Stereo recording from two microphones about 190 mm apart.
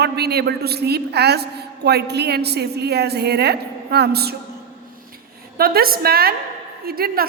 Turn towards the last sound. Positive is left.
turn(degrees=-55)  # may be behind; listen again after turning